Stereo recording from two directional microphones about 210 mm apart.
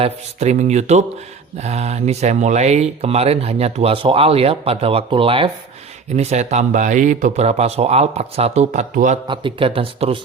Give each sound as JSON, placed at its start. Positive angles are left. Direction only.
{"t": 0.0, "sound": "speech", "side_deg": -30}
{"t": 9.2, "sound": "speech", "side_deg": -25}